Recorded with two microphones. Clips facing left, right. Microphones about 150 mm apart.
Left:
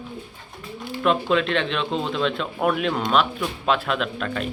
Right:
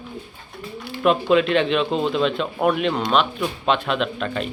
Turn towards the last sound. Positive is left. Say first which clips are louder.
# right 2 dB
turn(degrees=0)  # may be behind; listen again after turning